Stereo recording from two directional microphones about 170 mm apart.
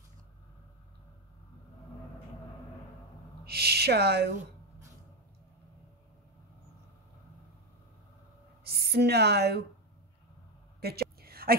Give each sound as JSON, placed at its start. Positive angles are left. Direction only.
{"t": 3.4, "sound": "speech", "side_deg": -70}
{"t": 8.6, "sound": "a woman's voice", "side_deg": -70}
{"t": 10.8, "sound": "a sound", "side_deg": -65}